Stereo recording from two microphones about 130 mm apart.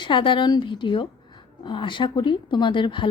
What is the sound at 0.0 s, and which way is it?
Speech, 40° left (ahead or behind).